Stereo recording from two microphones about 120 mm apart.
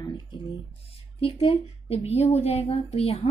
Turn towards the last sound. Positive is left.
turn(degrees=55)  # may be behind; listen again after turning